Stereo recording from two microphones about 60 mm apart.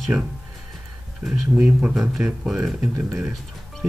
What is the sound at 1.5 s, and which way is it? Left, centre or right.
Speech, right.